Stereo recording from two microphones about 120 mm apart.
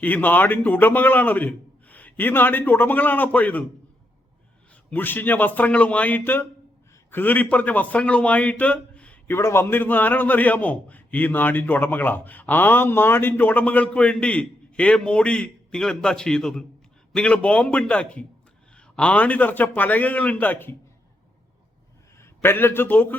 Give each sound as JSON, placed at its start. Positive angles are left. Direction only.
{"t": 0.0, "sound": "a man's voice", "side_deg": 15}
{"t": 4.9, "sound": "a man's voice", "side_deg": 15}
{"t": 22.2, "sound": "a man's voice", "side_deg": 20}